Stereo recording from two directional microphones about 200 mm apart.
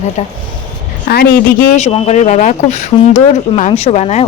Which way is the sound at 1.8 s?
30° left (ahead or behind).